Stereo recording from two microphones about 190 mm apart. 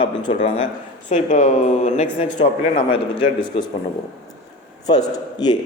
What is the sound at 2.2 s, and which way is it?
A man's voice, 25° left (ahead or behind).